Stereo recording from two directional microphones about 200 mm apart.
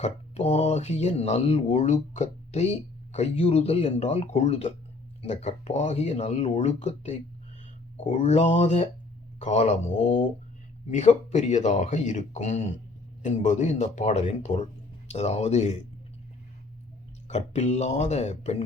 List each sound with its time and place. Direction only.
0.0 s speech: 35° left (ahead or behind)
17.2 s speech: 35° left (ahead or behind)